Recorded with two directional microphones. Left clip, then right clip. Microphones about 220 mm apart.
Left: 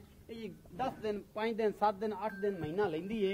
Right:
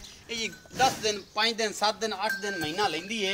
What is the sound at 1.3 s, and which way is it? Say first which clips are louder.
Speech: right 5 dB; 30° left (ahead or behind).